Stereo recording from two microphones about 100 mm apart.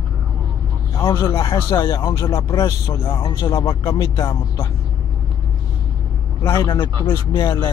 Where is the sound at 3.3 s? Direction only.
40° left (ahead or behind).